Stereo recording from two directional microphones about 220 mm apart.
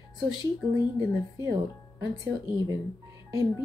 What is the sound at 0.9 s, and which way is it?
Speech, 15° right (ahead or behind).